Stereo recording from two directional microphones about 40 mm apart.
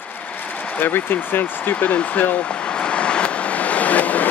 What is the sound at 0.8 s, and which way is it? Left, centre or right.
Speech, left.